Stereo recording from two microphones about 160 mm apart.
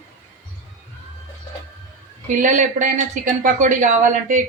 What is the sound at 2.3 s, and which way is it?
Speech, 50° right (ahead or behind).